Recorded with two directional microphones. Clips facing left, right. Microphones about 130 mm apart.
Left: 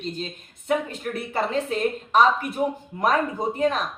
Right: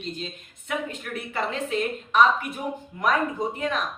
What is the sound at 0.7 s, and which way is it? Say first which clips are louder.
A woman's voice: left 5 dB; 35° left (ahead or behind).